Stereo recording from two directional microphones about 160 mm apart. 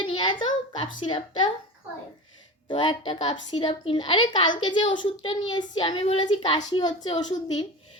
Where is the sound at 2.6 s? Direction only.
30° left (ahead or behind).